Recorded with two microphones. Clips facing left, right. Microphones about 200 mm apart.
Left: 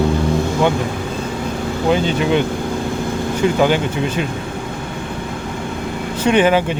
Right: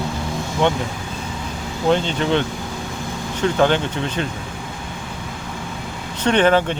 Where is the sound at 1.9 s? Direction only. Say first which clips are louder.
Left 2 dB; 10° left (ahead or behind).